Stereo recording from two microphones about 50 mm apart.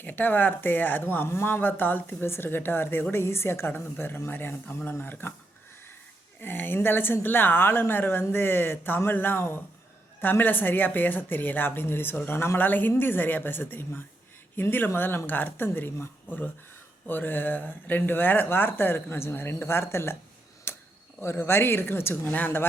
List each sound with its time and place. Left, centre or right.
0.0 s speech: left
2.2 s speech: left
6.4 s speech: left
20.7 s a sound: left
21.2 s speech: left
22.3 s speech: left